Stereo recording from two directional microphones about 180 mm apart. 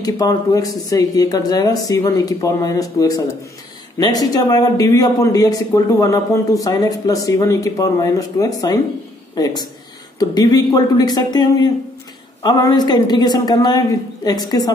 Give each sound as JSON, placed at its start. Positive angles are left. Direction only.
{"t": 0.0, "sound": "speech", "side_deg": 20}
{"t": 10.1, "sound": "speech", "side_deg": 20}